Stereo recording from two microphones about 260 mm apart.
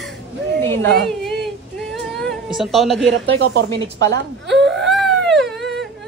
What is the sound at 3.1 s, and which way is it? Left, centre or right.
Speech, right.